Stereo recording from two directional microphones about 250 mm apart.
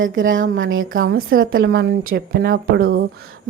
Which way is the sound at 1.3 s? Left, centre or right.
Right.